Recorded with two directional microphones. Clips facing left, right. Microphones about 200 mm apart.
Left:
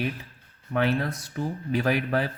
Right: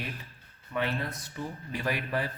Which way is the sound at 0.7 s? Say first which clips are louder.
Left 6 dB; 45° left (ahead or behind).